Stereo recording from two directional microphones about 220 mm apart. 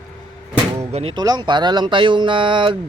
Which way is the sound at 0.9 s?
20° right (ahead or behind).